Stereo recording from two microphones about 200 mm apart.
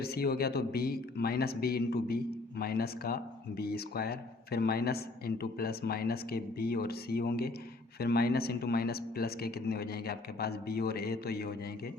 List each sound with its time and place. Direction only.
0.0 s speech: 50° left (ahead or behind)